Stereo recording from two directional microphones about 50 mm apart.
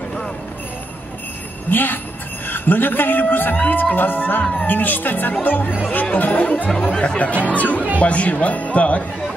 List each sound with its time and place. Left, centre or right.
1.7 s speech: left
6.8 s speech: centre